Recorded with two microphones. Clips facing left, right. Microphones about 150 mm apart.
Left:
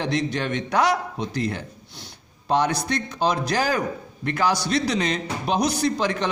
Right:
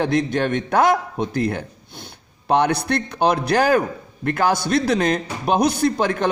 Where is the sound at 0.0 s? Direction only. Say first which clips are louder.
Right 5 dB; 50° right (ahead or behind).